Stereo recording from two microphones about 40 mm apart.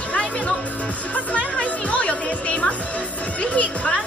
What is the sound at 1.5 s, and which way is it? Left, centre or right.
Music, left.